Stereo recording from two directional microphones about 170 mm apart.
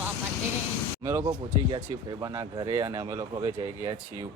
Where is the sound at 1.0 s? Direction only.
15° right (ahead or behind).